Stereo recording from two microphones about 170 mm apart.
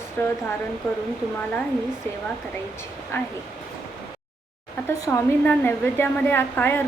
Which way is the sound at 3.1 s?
15° left (ahead or behind).